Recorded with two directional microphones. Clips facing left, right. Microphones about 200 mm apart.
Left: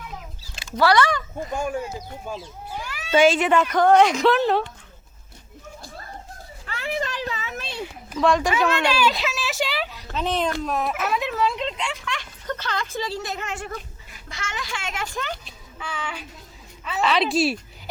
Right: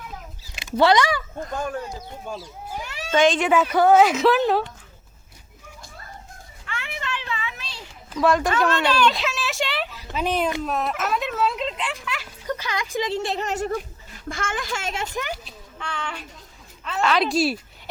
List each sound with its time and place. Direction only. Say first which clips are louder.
0.5 s a sound: right 1 dB; 20° right (ahead or behind)
1.4 s speech: left 2 dB; 5° left (ahead or behind)
2.7 s cat: even; 20° right (ahead or behind)
3.1 s speech: left 2 dB; 10° left (ahead or behind)
3.5 s speech: right 1 dB; 5° right (ahead or behind)
6.7 s children playing: left 4 dB; 35° left (ahead or behind); by 7.9 s 55° left (ahead or behind)
8.2 s speech: even; centre (ahead or behind); by 13.8 s 40° right (ahead or behind)
14.3 s a woman's voice: right 5 dB; 50° right (ahead or behind)
14.9 s speech: right 2 dB; 20° right (ahead or behind)
15.2 s speech: right 1 dB; 10° right (ahead or behind)
15.8 s speech: even; 5° left (ahead or behind)